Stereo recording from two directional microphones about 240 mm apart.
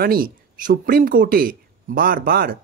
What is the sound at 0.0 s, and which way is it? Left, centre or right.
Speech, right.